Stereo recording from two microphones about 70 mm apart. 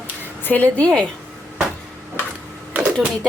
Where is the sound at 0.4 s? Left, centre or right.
Left.